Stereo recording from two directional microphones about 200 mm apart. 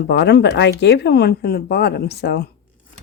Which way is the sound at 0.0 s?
55° left (ahead or behind).